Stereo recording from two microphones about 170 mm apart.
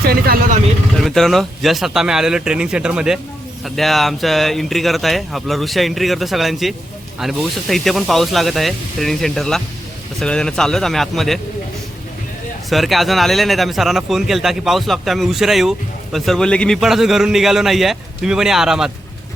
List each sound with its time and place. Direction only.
0.0 s vehicle: 60° right (ahead or behind)
0.9 s speech: centre (ahead or behind)
12.7 s speech: centre (ahead or behind)